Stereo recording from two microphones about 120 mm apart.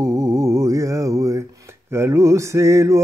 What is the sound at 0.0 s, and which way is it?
Music, 25° right (ahead or behind).